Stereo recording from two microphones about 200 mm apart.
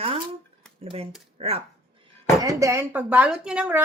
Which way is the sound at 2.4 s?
15° right (ahead or behind).